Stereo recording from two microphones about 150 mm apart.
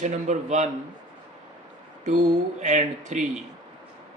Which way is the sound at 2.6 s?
50° right (ahead or behind).